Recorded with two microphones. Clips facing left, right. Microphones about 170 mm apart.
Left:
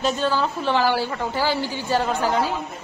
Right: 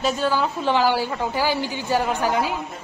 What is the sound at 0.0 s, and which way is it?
A woman's voice, 10° right (ahead or behind).